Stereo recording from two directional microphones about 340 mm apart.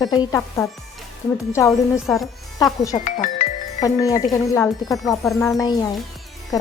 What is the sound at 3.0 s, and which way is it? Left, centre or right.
Speech, left.